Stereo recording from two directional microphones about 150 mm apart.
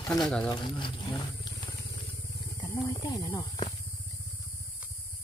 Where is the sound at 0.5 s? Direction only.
35° left (ahead or behind).